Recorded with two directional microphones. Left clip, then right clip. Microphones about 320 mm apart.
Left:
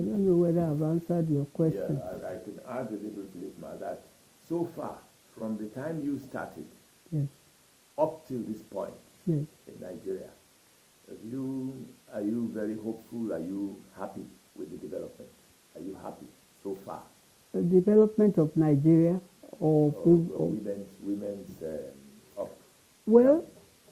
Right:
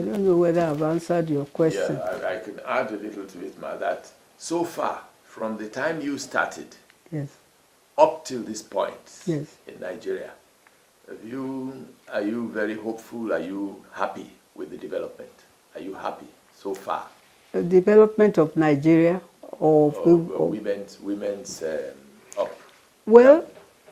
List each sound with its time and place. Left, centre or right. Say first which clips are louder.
0.1 s speech: right 6 dB; centre
8.7 s speech: right 13 dB; centre
11.3 s speech: right 4 dB; centre
19.5 s speech: right 8 dB; right
23.0 s speech: right 9 dB; centre